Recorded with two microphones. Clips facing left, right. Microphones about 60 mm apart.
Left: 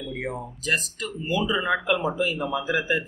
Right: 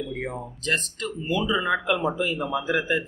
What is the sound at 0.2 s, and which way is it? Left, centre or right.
Speech, centre.